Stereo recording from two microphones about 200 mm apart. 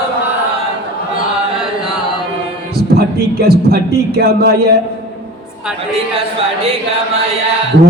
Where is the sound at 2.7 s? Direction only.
50° right (ahead or behind).